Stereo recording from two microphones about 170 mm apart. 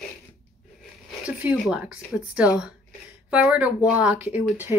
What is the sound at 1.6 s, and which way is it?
Speech, 5° right (ahead or behind).